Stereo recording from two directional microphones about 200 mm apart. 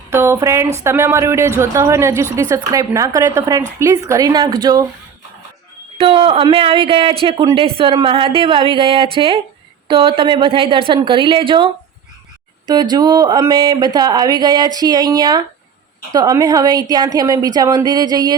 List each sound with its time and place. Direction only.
0.1 s a woman's voice: 15° right (ahead or behind)
6.0 s speech: 25° right (ahead or behind)